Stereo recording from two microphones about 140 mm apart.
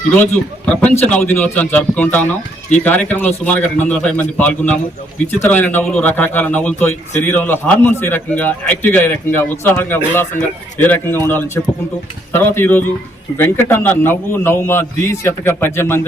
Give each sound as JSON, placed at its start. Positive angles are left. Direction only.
{"t": 0.2, "sound": "a man's voice", "side_deg": 10}